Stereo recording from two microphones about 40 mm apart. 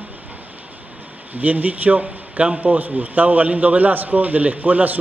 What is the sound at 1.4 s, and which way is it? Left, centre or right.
A man's voice, right.